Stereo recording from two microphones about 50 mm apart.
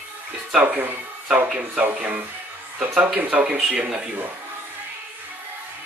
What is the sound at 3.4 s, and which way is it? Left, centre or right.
Speech, centre.